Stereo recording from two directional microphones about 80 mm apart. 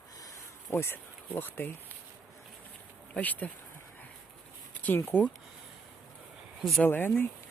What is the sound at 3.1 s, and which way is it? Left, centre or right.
Speech, left.